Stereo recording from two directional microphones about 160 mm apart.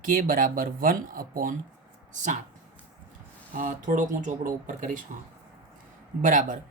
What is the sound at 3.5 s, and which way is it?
Speech, 55° right (ahead or behind).